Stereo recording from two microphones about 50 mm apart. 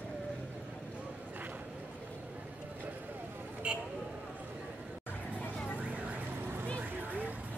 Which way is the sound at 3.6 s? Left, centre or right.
Right.